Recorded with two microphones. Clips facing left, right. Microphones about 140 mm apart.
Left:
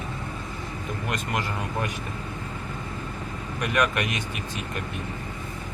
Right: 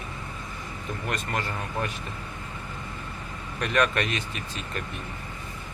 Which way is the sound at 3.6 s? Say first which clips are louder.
Even; 15° left (ahead or behind).